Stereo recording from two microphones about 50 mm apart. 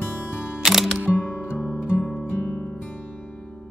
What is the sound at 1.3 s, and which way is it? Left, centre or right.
Music, left.